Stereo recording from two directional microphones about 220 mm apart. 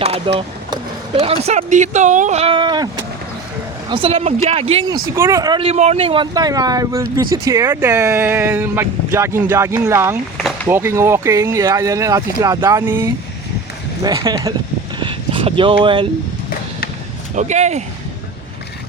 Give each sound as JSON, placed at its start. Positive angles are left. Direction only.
{"t": 0.3, "sound": "speech", "side_deg": -20}
{"t": 14.9, "sound": "a sound", "side_deg": -20}
{"t": 17.3, "sound": "speech", "side_deg": -30}